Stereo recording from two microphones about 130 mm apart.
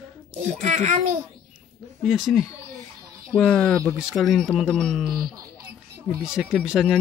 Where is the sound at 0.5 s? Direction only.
65° right (ahead or behind).